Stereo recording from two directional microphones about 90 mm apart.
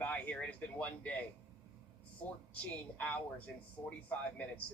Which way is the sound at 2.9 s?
15° left (ahead or behind).